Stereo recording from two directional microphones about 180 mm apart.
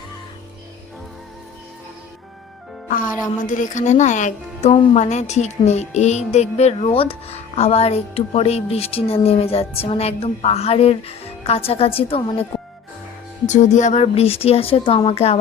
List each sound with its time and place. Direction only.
3.4 s a woman's voice: 45° left (ahead or behind)
13.5 s a woman's voice: 40° left (ahead or behind)